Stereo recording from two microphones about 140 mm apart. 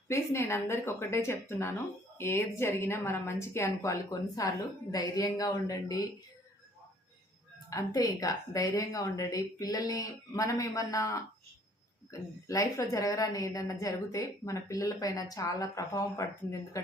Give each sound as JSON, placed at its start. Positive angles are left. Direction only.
{"t": 0.1, "sound": "a woman's voice", "side_deg": 20}
{"t": 7.7, "sound": "a woman's voice", "side_deg": 25}
{"t": 12.5, "sound": "a woman's voice", "side_deg": 25}